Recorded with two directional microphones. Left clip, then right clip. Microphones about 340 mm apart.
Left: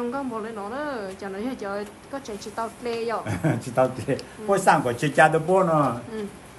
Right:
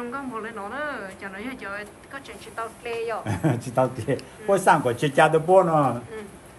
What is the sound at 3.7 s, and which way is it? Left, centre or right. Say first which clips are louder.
Speech: left 2 dB; centre.